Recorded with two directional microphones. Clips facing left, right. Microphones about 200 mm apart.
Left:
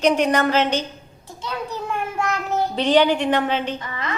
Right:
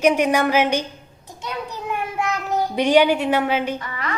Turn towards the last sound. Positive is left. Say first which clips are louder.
# even
turn(degrees=25)  # may be behind; listen again after turning